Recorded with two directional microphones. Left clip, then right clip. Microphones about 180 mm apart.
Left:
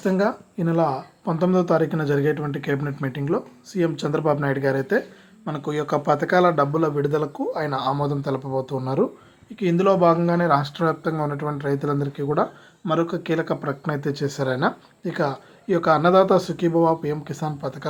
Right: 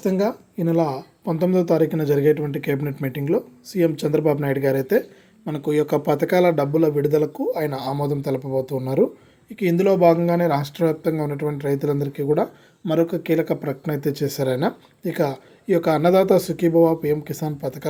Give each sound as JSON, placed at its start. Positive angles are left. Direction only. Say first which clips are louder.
{"t": 0.0, "sound": "speech", "louder": "even", "side_deg": -30}